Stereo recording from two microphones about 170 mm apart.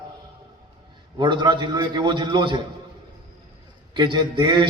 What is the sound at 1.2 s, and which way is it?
A man's voice, 25° right (ahead or behind).